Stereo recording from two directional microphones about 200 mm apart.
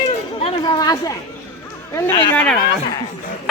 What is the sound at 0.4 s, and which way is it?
Chatter, 20° left (ahead or behind).